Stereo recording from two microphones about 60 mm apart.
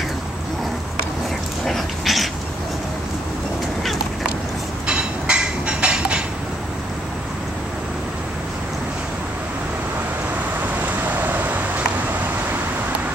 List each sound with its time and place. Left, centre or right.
1.7 s dog: centre
4.8 s a sound: centre
10.8 s vehicle: right